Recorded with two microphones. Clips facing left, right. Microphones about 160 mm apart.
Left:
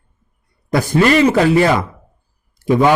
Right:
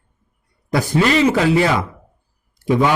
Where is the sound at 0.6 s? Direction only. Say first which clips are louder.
Left 3 dB; 50° left (ahead or behind).